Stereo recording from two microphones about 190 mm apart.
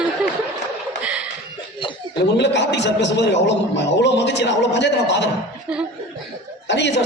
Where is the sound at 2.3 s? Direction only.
65° left (ahead or behind).